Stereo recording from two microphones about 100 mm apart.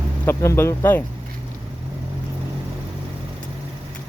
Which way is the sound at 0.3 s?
25° left (ahead or behind).